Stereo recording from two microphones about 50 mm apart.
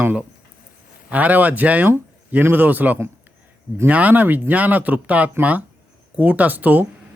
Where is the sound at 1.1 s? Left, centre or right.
Right.